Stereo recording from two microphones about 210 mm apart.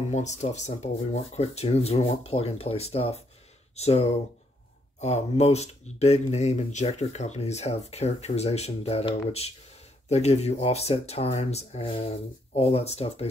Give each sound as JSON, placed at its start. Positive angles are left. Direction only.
{"t": 0.1, "sound": "speech", "side_deg": 35}